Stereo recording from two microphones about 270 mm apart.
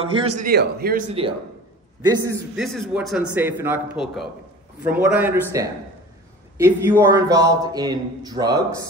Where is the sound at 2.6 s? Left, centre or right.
Centre.